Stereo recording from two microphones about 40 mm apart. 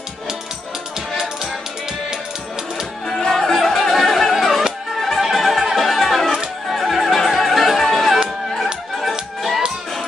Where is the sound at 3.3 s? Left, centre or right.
Centre.